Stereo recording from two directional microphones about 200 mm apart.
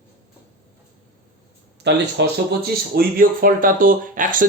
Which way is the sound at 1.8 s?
60° right (ahead or behind).